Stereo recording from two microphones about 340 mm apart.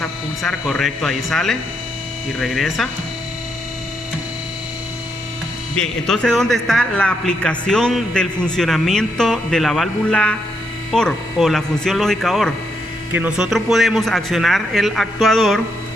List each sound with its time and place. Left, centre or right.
0.0 s a man's voice: centre
5.7 s a man's voice: centre